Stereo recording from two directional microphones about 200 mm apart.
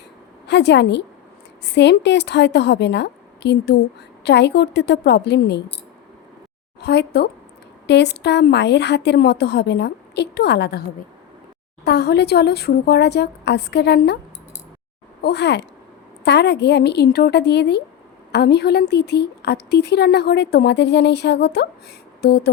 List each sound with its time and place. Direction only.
0.4 s a woman's voice: 60° left (ahead or behind)
6.7 s a woman's voice: 55° left (ahead or behind)
11.9 s a woman's voice: 55° left (ahead or behind)
15.2 s a woman's voice: 55° left (ahead or behind)